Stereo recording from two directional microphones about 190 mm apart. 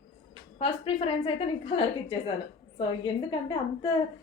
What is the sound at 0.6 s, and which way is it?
A woman's voice, 30° left (ahead or behind).